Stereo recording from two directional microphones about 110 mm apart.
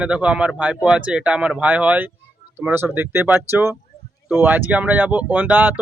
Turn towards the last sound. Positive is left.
turn(degrees=-15)  # may be behind; listen again after turning